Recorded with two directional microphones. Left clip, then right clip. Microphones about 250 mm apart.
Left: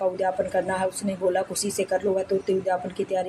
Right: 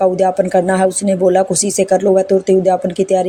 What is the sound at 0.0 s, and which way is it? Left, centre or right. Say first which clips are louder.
Speech: right 11 dB; right.